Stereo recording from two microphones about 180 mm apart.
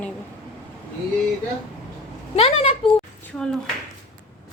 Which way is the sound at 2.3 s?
35° left (ahead or behind).